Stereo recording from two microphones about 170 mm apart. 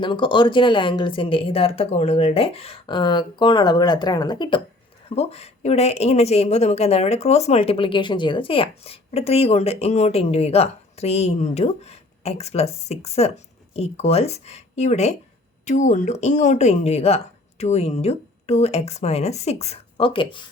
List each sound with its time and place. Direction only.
0.0 s speech: 30° left (ahead or behind)